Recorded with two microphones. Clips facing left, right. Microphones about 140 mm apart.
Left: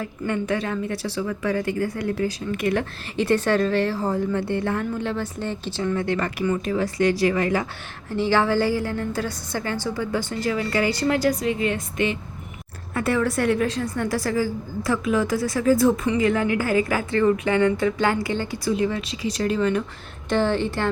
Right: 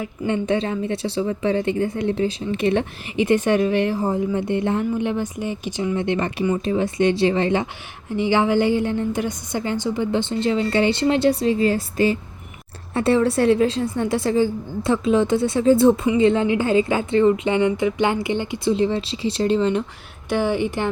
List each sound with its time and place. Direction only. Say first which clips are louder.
0.0 s speech: right 3 dB; 25° right (ahead or behind)
20.3 s speech: right 1 dB; 10° right (ahead or behind)